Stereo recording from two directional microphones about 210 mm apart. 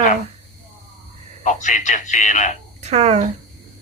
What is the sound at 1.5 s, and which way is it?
A man's voice, 35° left (ahead or behind).